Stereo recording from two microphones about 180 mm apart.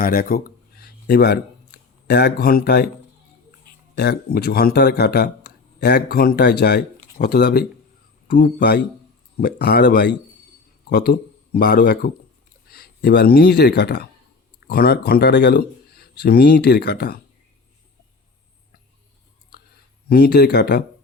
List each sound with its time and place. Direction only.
0.0 s a sound: 55° left (ahead or behind)
2.0 s speech: 65° left (ahead or behind)
3.9 s speech: 65° left (ahead or behind)
8.3 s speech: 50° left (ahead or behind)
20.1 s speech: 60° left (ahead or behind)